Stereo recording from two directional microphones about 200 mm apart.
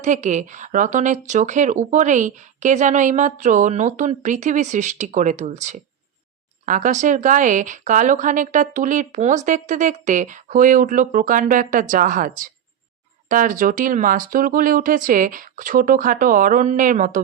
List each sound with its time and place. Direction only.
0.0 s speech: 35° right (ahead or behind)